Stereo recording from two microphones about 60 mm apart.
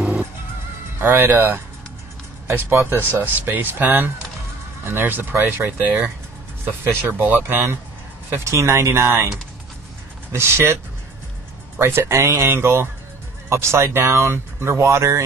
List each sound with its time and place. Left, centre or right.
1.0 s speech: right
8.5 s speech: right
10.3 s speech: right
11.8 s speech: right